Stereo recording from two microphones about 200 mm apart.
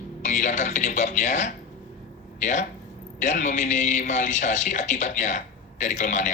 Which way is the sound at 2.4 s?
40° left (ahead or behind).